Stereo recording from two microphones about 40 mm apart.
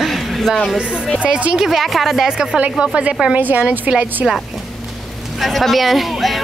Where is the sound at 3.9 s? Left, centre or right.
Right.